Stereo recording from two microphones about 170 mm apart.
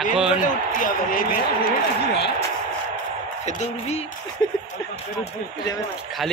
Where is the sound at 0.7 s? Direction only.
55° left (ahead or behind).